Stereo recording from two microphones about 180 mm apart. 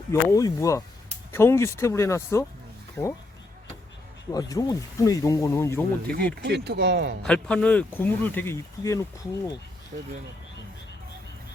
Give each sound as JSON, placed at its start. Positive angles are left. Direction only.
{"t": 0.1, "sound": "speech", "side_deg": 20}
{"t": 4.3, "sound": "speech", "side_deg": 20}
{"t": 6.1, "sound": "speech", "side_deg": -60}
{"t": 7.2, "sound": "speech", "side_deg": 5}
{"t": 9.9, "sound": "speech", "side_deg": -45}